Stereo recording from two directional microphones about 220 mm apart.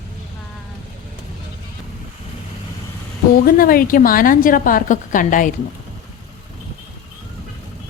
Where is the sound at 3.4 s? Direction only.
40° left (ahead or behind).